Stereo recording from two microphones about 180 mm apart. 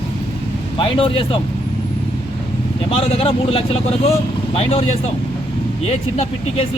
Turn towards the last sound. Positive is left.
turn(degrees=35)  # may be behind; listen again after turning